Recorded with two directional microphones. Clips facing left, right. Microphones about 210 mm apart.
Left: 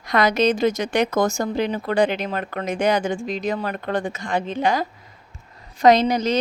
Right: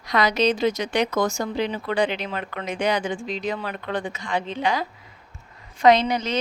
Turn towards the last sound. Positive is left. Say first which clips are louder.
# left 2 dB
turn(degrees=40)  # may be behind; listen again after turning